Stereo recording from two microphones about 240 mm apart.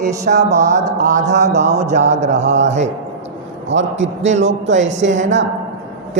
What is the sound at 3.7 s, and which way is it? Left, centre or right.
A man's voice, right.